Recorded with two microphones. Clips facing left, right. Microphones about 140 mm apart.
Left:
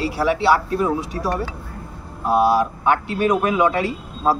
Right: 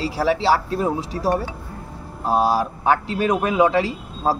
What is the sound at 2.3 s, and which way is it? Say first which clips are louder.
Speech: left 2 dB; 35° right (ahead or behind).